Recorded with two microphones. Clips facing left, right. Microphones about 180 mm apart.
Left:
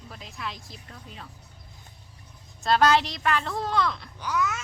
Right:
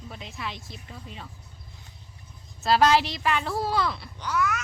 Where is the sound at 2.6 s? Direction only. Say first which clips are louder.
Right 1 dB; 5° right (ahead or behind).